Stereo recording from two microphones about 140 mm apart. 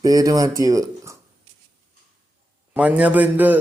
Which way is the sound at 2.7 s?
10° right (ahead or behind).